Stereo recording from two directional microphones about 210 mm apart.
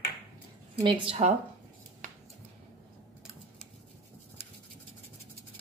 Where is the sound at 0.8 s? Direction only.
25° right (ahead or behind).